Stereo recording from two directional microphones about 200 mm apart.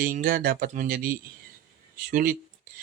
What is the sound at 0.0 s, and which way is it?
A man's voice, 45° right (ahead or behind).